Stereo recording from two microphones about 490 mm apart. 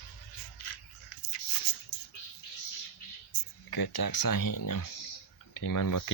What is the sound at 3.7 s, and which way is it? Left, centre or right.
Speech, left.